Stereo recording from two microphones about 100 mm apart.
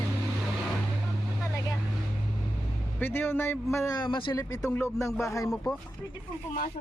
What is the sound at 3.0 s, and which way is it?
Speech, 20° left (ahead or behind).